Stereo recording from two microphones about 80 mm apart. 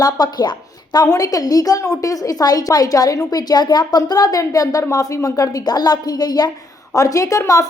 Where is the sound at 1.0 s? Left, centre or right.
Left.